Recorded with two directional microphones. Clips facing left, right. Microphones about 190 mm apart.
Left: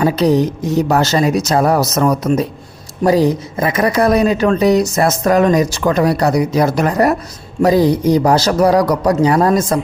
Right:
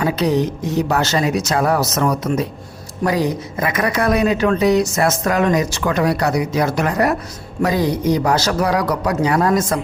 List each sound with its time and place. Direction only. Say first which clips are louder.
0.0 s speech: left 4 dB; 35° left (ahead or behind)